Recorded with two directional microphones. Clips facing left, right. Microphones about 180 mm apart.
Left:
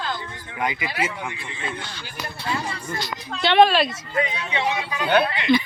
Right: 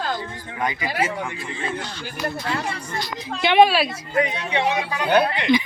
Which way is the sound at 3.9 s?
40° right (ahead or behind).